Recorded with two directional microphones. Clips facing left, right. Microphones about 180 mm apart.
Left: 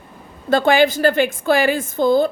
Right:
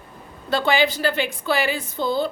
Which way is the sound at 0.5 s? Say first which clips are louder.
Left 6 dB; 50° left (ahead or behind).